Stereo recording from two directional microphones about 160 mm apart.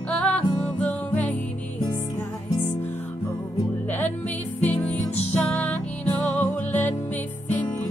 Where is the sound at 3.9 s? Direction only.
10° left (ahead or behind).